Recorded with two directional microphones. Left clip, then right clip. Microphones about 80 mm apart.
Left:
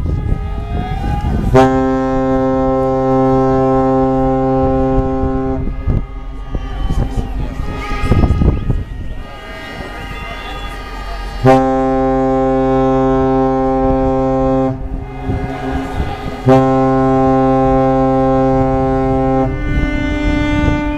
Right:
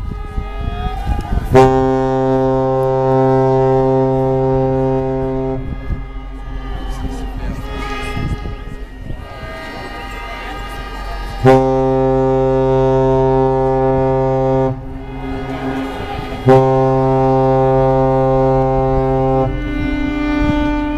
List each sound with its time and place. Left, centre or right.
1.5 s music: right
11.4 s foghorn: right
12.1 s music: right
15.5 s a sound: right
16.6 s foghorn: left